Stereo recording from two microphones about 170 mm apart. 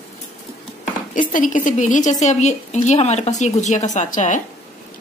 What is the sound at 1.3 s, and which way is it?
A woman's voice, 50° left (ahead or behind).